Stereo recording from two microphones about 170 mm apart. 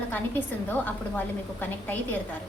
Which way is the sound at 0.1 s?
10° left (ahead or behind).